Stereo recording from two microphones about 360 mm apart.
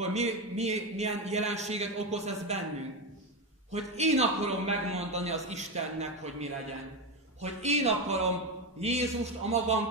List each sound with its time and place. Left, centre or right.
0.0 s a man's voice: centre
3.7 s a man's voice: centre